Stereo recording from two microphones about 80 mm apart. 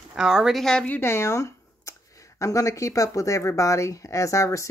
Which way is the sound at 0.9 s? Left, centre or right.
Left.